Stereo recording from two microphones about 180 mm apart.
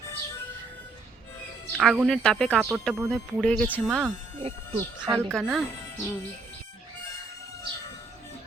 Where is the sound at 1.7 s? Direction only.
Centre (ahead or behind).